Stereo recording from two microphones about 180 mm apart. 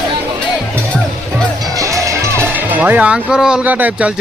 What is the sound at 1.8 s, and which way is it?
Music, 15° right (ahead or behind).